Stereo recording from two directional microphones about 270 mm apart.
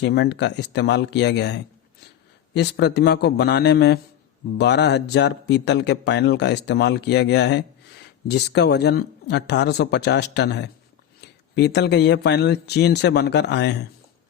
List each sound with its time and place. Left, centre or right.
0.0 s speech: left